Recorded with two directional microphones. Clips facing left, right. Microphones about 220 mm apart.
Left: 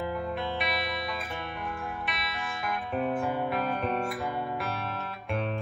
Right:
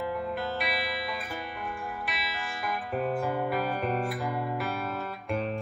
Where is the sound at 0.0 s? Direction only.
Centre (ahead or behind).